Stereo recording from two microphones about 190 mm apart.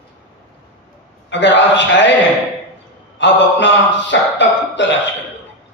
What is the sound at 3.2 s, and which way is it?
Speech, 70° left (ahead or behind).